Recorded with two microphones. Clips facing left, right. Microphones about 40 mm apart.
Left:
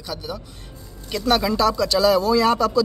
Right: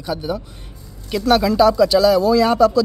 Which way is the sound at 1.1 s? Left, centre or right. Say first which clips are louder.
Right 4 dB; centre.